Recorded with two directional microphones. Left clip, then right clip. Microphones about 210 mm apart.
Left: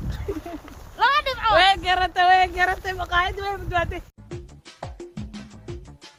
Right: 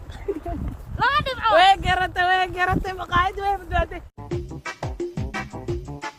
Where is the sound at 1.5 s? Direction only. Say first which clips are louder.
Right 2 dB; 60° right (ahead or behind); by 3.9 s 45° right (ahead or behind).